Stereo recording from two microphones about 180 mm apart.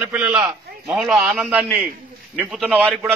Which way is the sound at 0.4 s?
15° right (ahead or behind).